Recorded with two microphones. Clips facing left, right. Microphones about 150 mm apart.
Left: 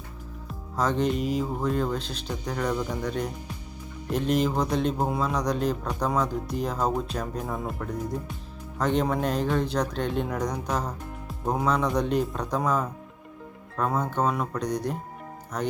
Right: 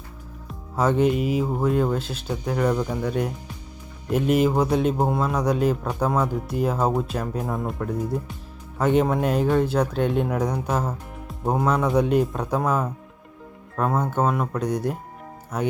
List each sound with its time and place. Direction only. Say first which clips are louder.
0.4 s speech: right 4 dB; 10° right (ahead or behind)